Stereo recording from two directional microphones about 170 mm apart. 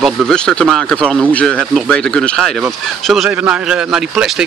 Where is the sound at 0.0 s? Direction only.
5° left (ahead or behind).